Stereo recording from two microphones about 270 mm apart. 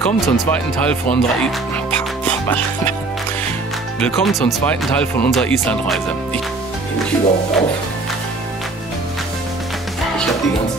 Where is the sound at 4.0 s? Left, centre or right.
Centre.